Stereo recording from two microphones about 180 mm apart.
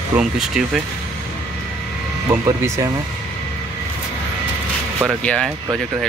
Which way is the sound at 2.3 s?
15° right (ahead or behind).